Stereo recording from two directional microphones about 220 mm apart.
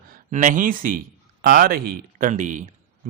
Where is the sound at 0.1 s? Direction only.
35° right (ahead or behind).